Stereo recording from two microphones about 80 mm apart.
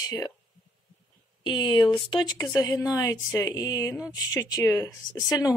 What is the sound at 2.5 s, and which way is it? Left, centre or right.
Speech, left.